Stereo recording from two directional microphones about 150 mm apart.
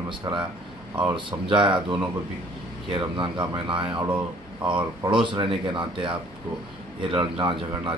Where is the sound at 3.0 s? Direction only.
30° right (ahead or behind).